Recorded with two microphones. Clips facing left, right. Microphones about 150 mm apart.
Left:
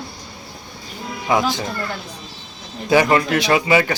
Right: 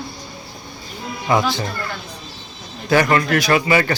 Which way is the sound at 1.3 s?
10° left (ahead or behind).